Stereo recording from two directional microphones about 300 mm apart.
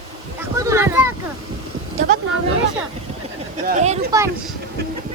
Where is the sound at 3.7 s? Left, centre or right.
Right.